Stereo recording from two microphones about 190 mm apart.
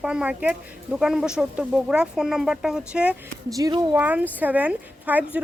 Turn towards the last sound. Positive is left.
turn(degrees=-5)  # may be behind; listen again after turning